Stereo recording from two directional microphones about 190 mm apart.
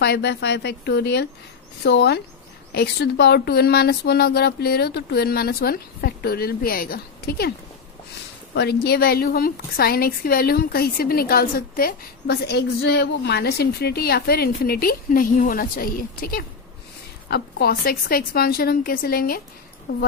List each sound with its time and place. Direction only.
0.0 s a woman's voice: 60° left (ahead or behind)